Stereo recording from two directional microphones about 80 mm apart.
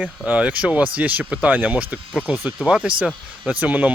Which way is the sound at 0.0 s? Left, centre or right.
Centre.